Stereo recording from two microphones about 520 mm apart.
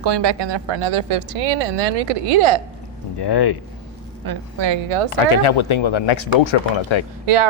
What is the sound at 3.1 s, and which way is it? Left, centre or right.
Speech, left.